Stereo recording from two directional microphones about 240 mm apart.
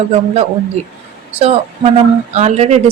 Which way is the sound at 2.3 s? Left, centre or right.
Right.